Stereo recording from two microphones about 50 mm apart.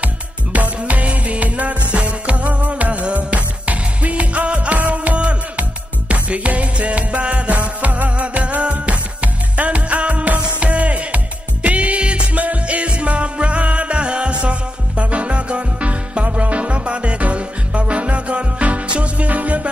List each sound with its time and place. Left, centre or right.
0.0 s music: right